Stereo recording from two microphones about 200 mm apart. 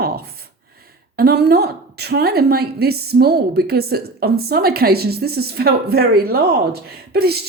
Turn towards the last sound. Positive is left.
turn(degrees=-50)  # may be behind; listen again after turning